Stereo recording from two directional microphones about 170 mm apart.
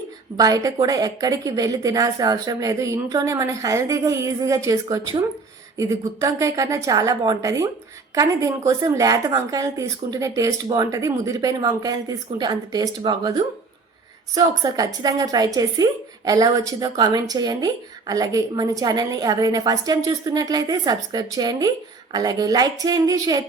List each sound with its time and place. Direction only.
0.3 s a woman's voice: 20° right (ahead or behind)